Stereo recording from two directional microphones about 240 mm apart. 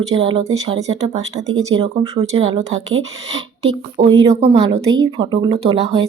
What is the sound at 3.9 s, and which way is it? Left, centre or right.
Speech, centre.